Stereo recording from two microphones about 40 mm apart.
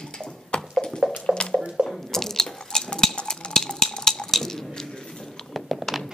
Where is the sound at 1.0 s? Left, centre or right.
Right.